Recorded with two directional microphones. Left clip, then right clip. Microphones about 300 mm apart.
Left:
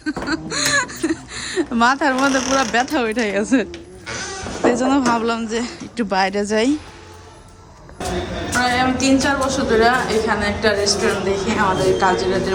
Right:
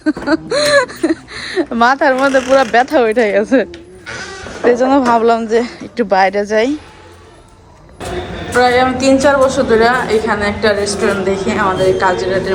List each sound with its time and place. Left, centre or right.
0.0 s a sound: centre
2.7 s a woman's voice: centre
3.7 s a woman's voice: left
8.5 s a woman's voice: centre